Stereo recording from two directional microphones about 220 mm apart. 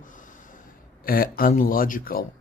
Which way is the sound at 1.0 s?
40° left (ahead or behind).